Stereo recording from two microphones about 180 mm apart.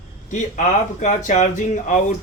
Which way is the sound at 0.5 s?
45° left (ahead or behind).